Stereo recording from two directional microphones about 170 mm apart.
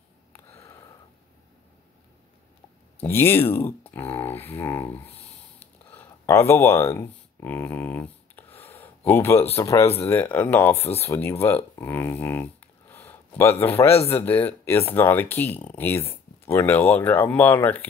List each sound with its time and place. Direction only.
0.3 s a sound: 15° left (ahead or behind)
3.0 s speech: 15° left (ahead or behind)
5.9 s speech: 10° left (ahead or behind)
8.7 s a sound: 10° left (ahead or behind)
9.6 s speech: 15° left (ahead or behind)
10.8 s speech: 35° left (ahead or behind)
11.1 s speech: 15° left (ahead or behind)